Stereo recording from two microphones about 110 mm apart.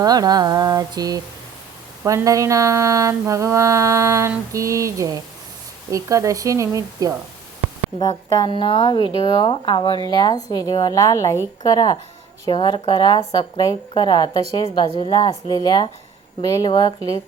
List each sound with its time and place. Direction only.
0.0 s speech: 35° right (ahead or behind)
2.0 s a sound: 30° right (ahead or behind)
8.0 s speech: 35° left (ahead or behind)
8.4 s speech: 50° left (ahead or behind); by 16.6 s 30° left (ahead or behind)
16.6 s speech: 40° left (ahead or behind)